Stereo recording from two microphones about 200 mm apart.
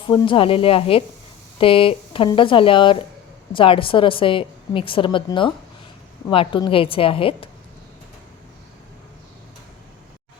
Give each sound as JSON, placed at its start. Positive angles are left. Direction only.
{"t": 0.1, "sound": "a woman's voice", "side_deg": 25}